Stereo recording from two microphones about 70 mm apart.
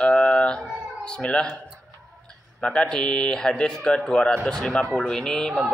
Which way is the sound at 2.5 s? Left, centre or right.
Centre.